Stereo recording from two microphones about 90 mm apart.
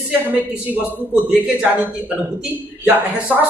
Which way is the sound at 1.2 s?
20° right (ahead or behind).